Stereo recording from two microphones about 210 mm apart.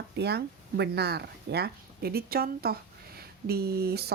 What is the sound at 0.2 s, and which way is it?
Speech, 50° right (ahead or behind).